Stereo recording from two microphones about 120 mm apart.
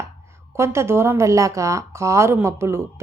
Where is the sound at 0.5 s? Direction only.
20° right (ahead or behind).